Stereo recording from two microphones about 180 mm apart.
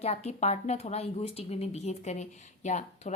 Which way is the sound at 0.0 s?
35° left (ahead or behind).